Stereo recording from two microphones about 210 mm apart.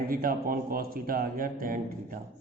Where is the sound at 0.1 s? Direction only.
45° right (ahead or behind).